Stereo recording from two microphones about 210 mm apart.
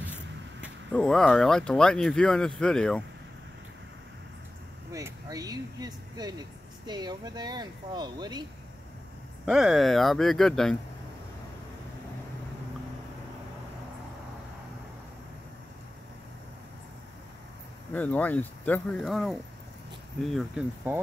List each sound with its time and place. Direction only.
0.6 s speech: 5° left (ahead or behind)
4.9 s speech: 15° right (ahead or behind)
9.5 s speech: centre (ahead or behind)
17.9 s speech: 5° left (ahead or behind)
20.9 s speech: 10° right (ahead or behind)